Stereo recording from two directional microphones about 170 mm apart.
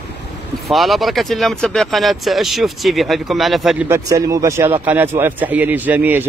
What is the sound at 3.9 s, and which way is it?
A man's voice, 20° right (ahead or behind).